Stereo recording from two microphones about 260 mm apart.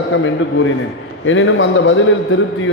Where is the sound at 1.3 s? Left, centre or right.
Left.